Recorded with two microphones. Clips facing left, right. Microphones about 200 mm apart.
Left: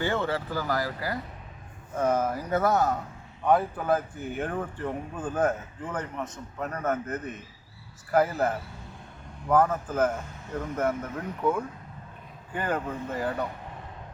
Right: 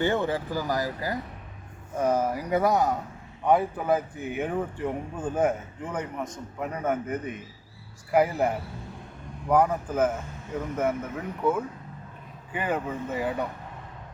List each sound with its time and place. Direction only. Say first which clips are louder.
0.0 s speech: right 2 dB; 15° right (ahead or behind)